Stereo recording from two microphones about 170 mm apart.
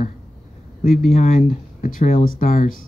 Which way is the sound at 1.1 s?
55° left (ahead or behind).